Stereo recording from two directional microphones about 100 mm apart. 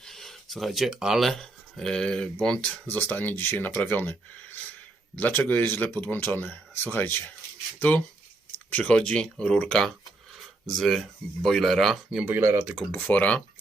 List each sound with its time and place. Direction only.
0.0 s speech: 5° left (ahead or behind)
12.1 s speech: 20° right (ahead or behind)
12.9 s speech: 15° left (ahead or behind)